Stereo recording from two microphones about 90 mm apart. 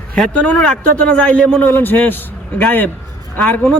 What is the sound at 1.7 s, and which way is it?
Speech, 20° left (ahead or behind).